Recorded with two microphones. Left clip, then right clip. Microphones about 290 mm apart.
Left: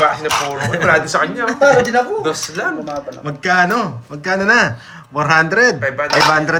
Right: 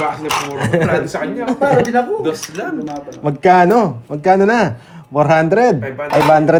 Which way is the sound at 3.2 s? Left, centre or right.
Centre.